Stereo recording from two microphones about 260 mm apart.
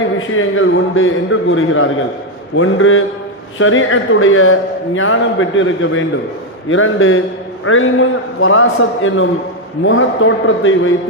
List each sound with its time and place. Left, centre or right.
0.2 s a man's voice: left